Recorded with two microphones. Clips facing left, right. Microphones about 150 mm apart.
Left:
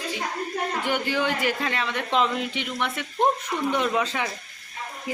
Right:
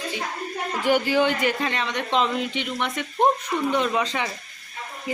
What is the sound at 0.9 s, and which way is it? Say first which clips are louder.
A man's voice: right 7 dB; 5° right (ahead or behind).